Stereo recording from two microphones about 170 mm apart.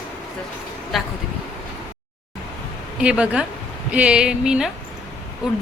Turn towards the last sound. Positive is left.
turn(degrees=-5)  # may be behind; listen again after turning